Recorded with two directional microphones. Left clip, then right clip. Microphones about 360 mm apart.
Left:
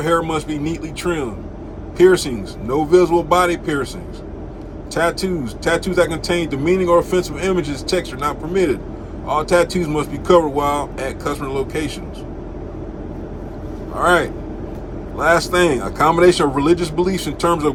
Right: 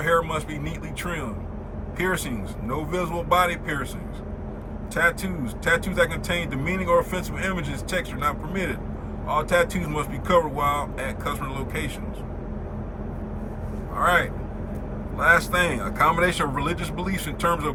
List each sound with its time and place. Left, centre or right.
0.0 s speech: centre
4.9 s speech: centre
14.0 s speech: centre